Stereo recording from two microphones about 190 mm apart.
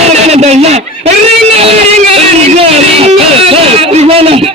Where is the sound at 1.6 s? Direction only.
30° right (ahead or behind).